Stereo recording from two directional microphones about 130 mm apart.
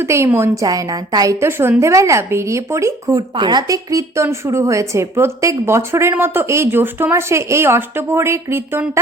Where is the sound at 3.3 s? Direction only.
35° right (ahead or behind).